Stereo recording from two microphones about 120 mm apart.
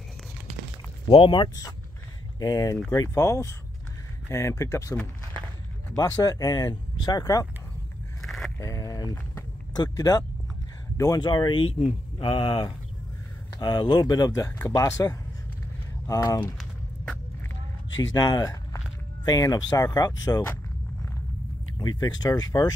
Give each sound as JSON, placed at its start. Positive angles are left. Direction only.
{"t": 1.1, "sound": "speech", "side_deg": 45}
{"t": 8.2, "sound": "a sound", "side_deg": 0}
{"t": 8.5, "sound": "a sound", "side_deg": 30}
{"t": 9.8, "sound": "speech", "side_deg": 35}
{"t": 18.1, "sound": "speech", "side_deg": 35}
{"t": 21.7, "sound": "speech", "side_deg": 35}